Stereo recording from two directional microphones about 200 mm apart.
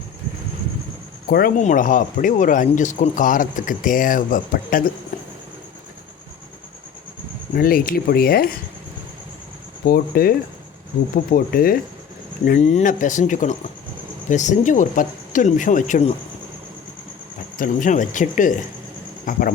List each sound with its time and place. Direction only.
1.3 s speech: 45° left (ahead or behind)
5.1 s a sound: 40° left (ahead or behind)
7.5 s speech: 45° left (ahead or behind)
9.8 s speech: 50° left (ahead or behind)
12.5 s speech: 35° left (ahead or behind)
17.6 s speech: 40° left (ahead or behind)